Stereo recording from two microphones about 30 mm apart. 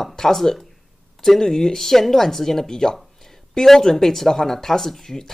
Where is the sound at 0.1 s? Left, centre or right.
Centre.